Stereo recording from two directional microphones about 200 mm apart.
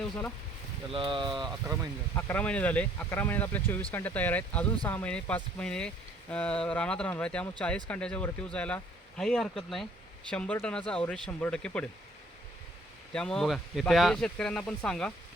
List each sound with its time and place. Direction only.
0.9 s speech: 25° right (ahead or behind)
2.1 s speech: 10° left (ahead or behind)
13.1 s speech: 5° left (ahead or behind)